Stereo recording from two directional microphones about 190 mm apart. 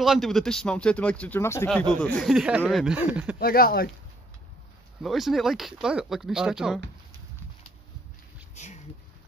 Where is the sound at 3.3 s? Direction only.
50° left (ahead or behind).